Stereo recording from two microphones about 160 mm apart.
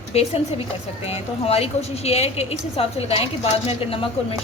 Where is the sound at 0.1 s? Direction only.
40° left (ahead or behind).